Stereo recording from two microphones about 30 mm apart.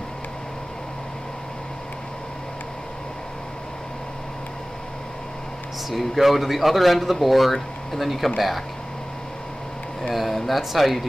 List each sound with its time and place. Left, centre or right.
5.9 s speech: centre
10.3 s speech: centre